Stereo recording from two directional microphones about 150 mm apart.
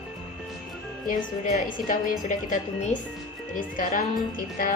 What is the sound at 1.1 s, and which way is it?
A woman's voice, 60° left (ahead or behind).